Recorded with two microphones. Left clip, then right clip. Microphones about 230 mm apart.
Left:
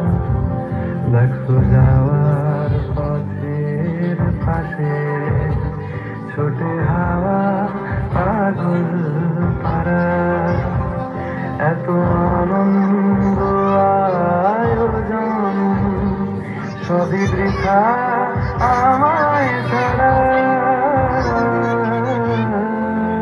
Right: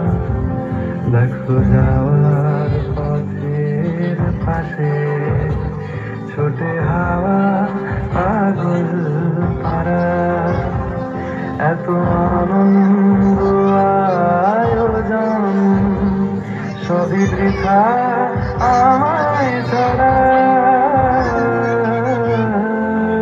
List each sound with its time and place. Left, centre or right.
6.9 s music: right
9.8 s music: right
11.6 s music: right
17.2 s music: right